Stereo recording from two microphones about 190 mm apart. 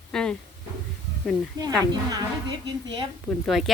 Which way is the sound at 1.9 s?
20° right (ahead or behind).